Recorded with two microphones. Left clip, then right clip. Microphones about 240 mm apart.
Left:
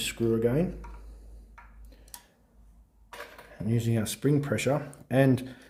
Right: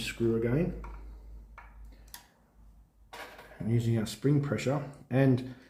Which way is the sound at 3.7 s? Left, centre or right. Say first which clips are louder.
Left 2 dB; left.